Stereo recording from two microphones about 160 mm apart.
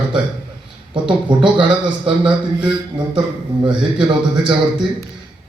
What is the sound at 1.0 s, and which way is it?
A man's voice, 30° right (ahead or behind).